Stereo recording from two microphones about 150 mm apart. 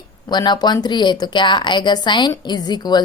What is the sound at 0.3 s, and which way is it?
A woman's voice, 30° left (ahead or behind).